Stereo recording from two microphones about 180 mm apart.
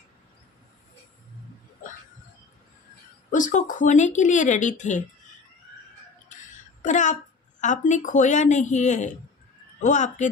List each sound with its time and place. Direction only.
3.3 s speech: 45° left (ahead or behind)
6.8 s a woman's voice: 45° left (ahead or behind)